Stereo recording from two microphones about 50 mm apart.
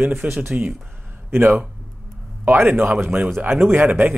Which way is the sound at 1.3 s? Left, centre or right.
Right.